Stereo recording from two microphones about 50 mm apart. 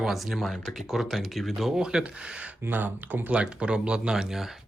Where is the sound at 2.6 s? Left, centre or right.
Right.